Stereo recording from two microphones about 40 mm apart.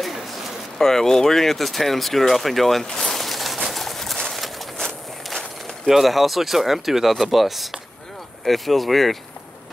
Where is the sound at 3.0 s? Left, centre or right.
Centre.